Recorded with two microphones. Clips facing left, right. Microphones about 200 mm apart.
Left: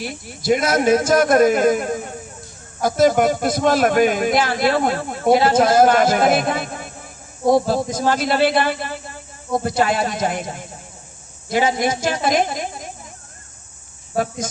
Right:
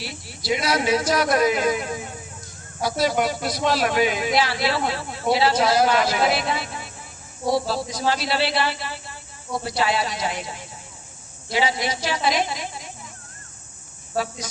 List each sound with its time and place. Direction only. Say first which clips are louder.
0.0 s speech: left 7 dB; 50° left (ahead or behind)